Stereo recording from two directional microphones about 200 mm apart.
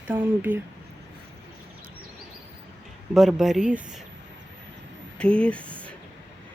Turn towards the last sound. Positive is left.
turn(degrees=5)  # may be behind; listen again after turning